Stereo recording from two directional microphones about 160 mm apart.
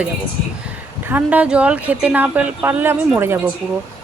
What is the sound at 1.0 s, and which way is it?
Speech, 10° right (ahead or behind).